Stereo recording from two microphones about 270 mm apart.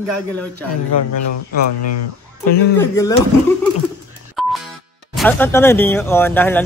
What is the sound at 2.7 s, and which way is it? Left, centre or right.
Speech, centre.